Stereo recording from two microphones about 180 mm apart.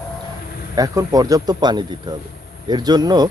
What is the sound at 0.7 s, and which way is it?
Speech, 20° right (ahead or behind).